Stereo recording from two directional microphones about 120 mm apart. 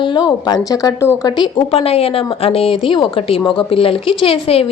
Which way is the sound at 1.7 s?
55° left (ahead or behind).